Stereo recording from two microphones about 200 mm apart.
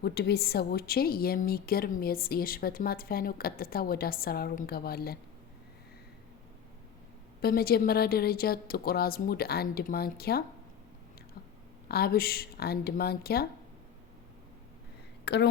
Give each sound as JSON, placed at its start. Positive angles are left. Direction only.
{"t": 0.0, "sound": "speech", "side_deg": 55}
{"t": 7.4, "sound": "speech", "side_deg": 50}
{"t": 11.9, "sound": "speech", "side_deg": 50}
{"t": 15.2, "sound": "a woman's voice", "side_deg": 55}